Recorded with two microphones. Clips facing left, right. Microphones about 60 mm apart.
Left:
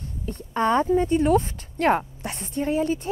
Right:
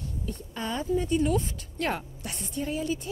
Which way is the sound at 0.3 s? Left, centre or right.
Left.